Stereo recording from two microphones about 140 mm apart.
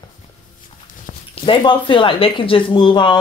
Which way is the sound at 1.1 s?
35° left (ahead or behind).